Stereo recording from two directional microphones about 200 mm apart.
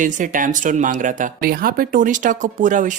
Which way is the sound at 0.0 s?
40° right (ahead or behind).